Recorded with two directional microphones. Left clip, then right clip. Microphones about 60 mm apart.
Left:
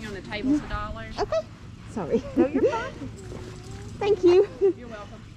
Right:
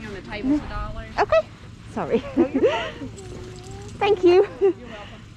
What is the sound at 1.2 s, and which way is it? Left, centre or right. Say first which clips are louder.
Speech: right 8 dB; centre.